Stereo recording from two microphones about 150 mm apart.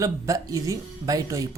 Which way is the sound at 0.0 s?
20° right (ahead or behind).